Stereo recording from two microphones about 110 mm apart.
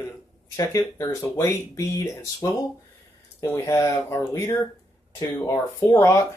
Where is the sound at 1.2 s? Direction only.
20° left (ahead or behind).